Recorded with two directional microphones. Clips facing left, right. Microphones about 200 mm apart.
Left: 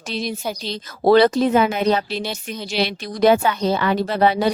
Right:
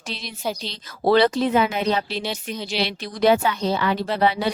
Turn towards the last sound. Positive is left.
turn(degrees=45)  # may be behind; listen again after turning